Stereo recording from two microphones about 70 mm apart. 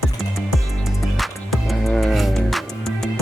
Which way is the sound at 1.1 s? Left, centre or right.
Centre.